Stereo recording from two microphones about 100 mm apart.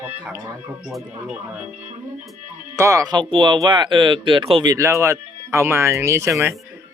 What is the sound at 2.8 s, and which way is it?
Speech, 35° right (ahead or behind).